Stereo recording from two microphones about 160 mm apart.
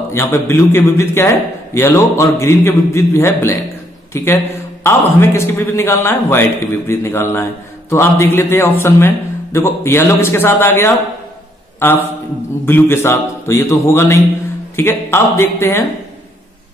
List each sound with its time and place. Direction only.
0.1 s a man's voice: 15° left (ahead or behind)